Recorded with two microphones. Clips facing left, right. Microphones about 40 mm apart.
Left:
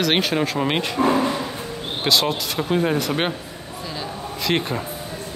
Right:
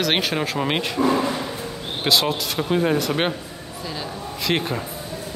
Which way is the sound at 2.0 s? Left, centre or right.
Centre.